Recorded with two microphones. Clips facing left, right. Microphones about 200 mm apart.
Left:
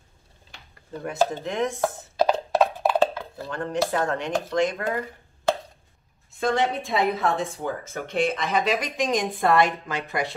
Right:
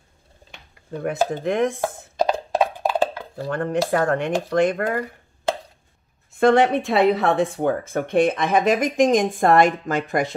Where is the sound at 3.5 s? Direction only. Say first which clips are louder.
Right 4 dB; 55° right (ahead or behind).